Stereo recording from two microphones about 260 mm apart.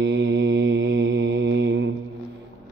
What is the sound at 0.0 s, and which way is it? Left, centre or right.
Mantra, right.